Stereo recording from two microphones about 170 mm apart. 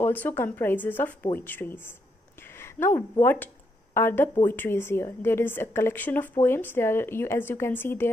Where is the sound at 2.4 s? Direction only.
15° left (ahead or behind).